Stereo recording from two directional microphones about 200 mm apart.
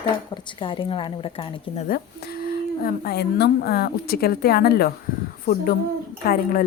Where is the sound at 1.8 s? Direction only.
50° left (ahead or behind).